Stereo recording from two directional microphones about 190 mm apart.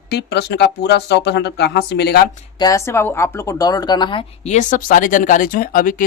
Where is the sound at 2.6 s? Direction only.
15° left (ahead or behind).